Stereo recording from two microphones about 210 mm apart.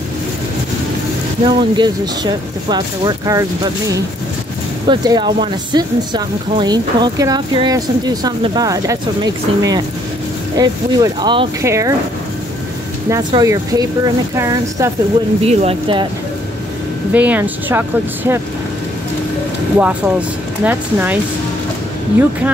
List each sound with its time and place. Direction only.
1.4 s a woman's voice: 20° right (ahead or behind)
13.1 s a woman's voice: 15° right (ahead or behind)
15.4 s speech: 30° right (ahead or behind)
17.1 s a woman's voice: 5° right (ahead or behind)
19.8 s a woman's voice: 5° right (ahead or behind)